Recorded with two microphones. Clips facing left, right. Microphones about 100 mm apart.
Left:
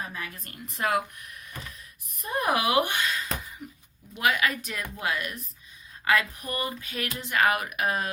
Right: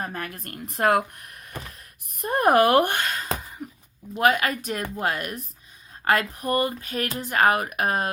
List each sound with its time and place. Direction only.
0.0 s speech: 55° right (ahead or behind)
3.6 s a sound: 45° right (ahead or behind)
4.1 s speech: 40° right (ahead or behind)